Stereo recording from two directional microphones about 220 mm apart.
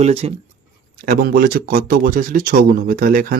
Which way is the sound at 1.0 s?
40° right (ahead or behind).